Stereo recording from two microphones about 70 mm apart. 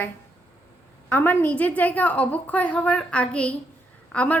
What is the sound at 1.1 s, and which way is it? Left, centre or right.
A woman's voice, left.